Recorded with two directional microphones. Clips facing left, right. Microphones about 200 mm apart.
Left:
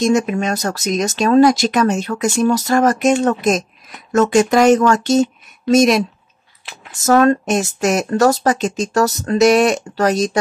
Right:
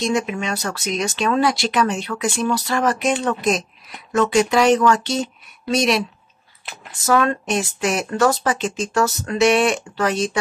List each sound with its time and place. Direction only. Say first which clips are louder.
0.0 s speech: left 6 dB; 45° left (ahead or behind)